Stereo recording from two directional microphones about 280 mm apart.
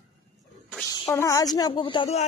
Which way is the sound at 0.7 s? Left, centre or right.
Centre.